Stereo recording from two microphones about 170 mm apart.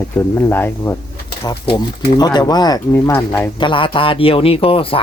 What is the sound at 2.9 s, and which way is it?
Speech, 15° left (ahead or behind).